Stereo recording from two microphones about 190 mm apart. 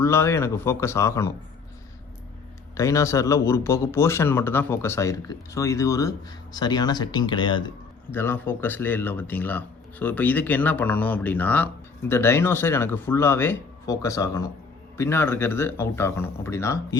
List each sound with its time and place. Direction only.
0.0 s speech: 15° left (ahead or behind)
2.7 s speech: 15° left (ahead or behind)
8.1 s speech: 10° left (ahead or behind)